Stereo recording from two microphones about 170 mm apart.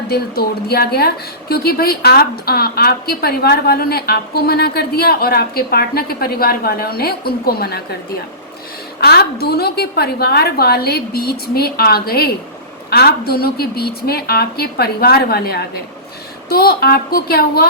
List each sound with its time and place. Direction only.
0.1 s a woman's voice: 65° left (ahead or behind)
9.0 s a woman's voice: 65° left (ahead or behind)